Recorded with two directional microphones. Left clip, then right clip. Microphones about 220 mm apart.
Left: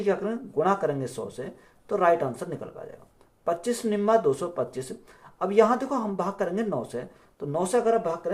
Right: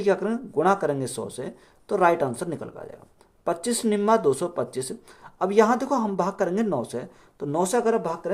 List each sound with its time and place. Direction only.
0.0 s speech: 45° right (ahead or behind)